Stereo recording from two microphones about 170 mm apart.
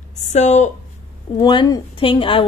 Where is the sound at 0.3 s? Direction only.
45° left (ahead or behind).